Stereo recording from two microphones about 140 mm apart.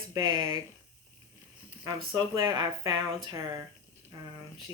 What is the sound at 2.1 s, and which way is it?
Speech, 30° right (ahead or behind).